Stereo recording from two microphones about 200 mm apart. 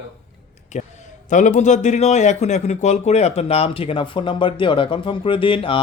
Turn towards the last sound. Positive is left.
turn(degrees=25)  # may be behind; listen again after turning